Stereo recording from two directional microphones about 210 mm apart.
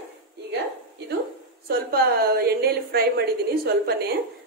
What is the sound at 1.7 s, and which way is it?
A woman's voice, 45° right (ahead or behind).